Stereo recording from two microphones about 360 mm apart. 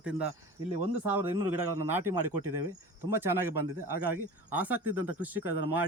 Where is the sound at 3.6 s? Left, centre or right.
Right.